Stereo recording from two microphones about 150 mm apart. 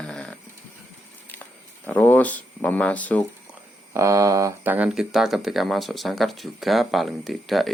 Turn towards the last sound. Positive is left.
turn(degrees=0)  # may be behind; listen again after turning